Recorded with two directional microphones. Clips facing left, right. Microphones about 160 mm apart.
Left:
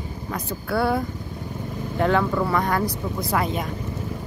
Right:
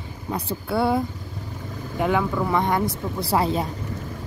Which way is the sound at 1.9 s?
10° right (ahead or behind).